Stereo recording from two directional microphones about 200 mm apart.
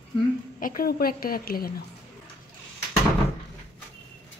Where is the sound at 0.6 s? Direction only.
45° left (ahead or behind).